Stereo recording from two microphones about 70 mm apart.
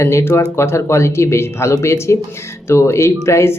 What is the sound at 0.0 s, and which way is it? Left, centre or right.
Speech, left.